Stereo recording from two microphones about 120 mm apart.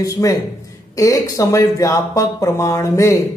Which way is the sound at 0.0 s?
30° left (ahead or behind).